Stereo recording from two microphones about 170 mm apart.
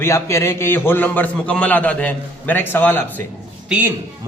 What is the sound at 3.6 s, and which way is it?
Speech, 10° right (ahead or behind).